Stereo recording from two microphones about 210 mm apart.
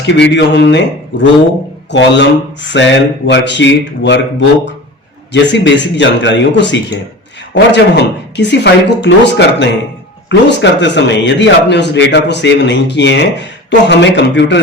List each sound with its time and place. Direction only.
0.0 s a man's voice: 55° left (ahead or behind)